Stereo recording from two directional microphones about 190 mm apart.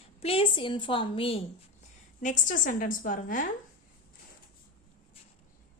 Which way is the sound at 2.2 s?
40° left (ahead or behind).